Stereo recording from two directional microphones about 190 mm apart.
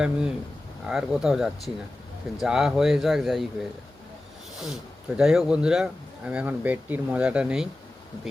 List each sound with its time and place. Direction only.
0.0 s speech: 5° right (ahead or behind)
4.6 s speech: centre (ahead or behind)